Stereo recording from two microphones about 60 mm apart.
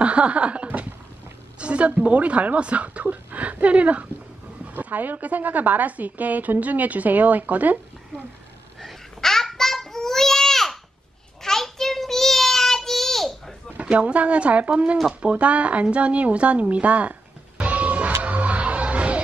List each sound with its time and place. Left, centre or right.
0.0 s a sound: right
1.6 s a woman's voice: right
8.8 s babbling: centre
11.4 s child singing: centre
13.7 s a woman's voice: right
18.2 s a sound: right